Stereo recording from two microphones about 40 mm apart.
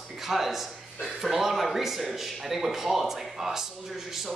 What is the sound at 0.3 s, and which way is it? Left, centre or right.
A man's voice, centre.